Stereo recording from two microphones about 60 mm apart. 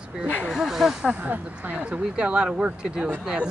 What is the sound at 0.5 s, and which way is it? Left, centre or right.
Speech, centre.